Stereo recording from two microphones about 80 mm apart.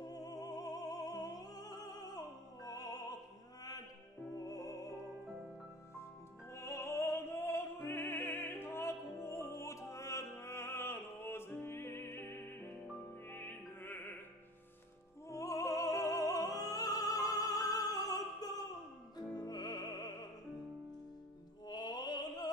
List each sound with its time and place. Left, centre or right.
0.0 s music: left
4.5 s music: left
6.5 s opera: left
13.3 s music: left
15.2 s opera: left
19.1 s music: left
21.6 s opera: left